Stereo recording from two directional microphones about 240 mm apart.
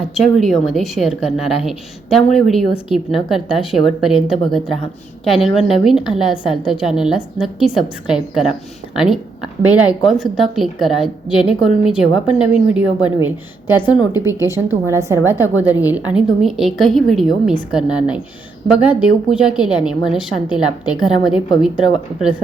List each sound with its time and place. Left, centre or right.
0.1 s a woman's voice: centre
20.5 s a woman's voice: centre
20.9 s a woman's voice: centre